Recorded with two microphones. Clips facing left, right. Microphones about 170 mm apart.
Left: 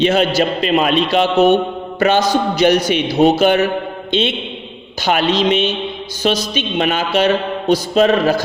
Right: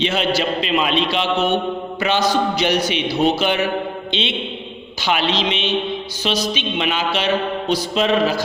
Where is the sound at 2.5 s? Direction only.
45° left (ahead or behind).